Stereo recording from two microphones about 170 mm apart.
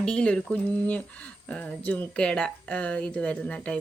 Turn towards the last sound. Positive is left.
turn(degrees=10)  # may be behind; listen again after turning